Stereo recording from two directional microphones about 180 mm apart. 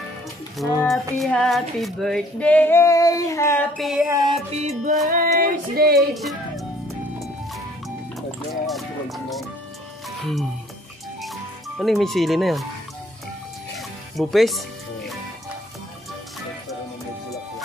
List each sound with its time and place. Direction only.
0.6 s a sound: centre (ahead or behind)
3.7 s speech: centre (ahead or behind)
4.6 s music: 35° right (ahead or behind)
5.1 s music: 50° right (ahead or behind)
5.9 s speech: centre (ahead or behind)
8.6 s speech: centre (ahead or behind)
10.0 s music: centre (ahead or behind)
11.8 s speech: centre (ahead or behind)
13.7 s music: centre (ahead or behind)